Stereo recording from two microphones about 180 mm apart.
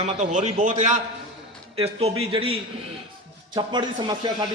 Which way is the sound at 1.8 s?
35° right (ahead or behind).